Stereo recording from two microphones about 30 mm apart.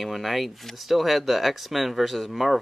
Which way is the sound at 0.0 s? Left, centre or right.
Centre.